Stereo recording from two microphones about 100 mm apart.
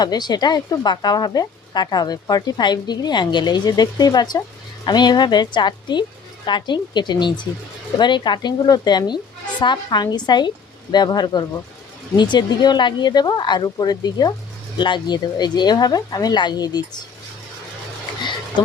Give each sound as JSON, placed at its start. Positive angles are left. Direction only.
{"t": 0.0, "sound": "speech", "side_deg": 45}